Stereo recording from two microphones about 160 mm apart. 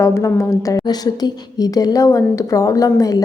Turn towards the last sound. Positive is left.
turn(degrees=20)  # may be behind; listen again after turning